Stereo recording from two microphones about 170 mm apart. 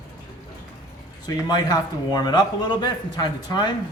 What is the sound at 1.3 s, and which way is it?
A man's voice, 20° left (ahead or behind).